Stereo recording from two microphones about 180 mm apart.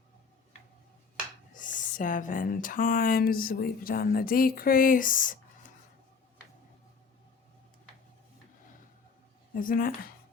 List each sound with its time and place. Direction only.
1.5 s speech: 45° left (ahead or behind)
9.6 s speech: 50° left (ahead or behind)